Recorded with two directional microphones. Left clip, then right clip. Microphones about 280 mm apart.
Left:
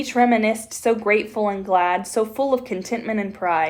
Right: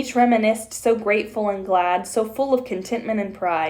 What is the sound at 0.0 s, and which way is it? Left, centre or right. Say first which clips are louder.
Speech: even; centre.